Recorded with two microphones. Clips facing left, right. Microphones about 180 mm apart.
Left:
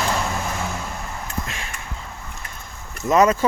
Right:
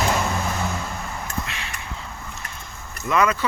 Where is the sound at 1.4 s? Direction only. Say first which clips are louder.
Left 1 dB; 45° left (ahead or behind).